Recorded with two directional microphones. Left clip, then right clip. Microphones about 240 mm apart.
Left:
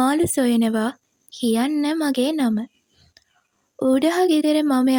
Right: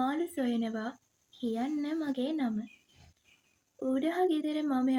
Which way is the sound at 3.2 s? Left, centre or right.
Left.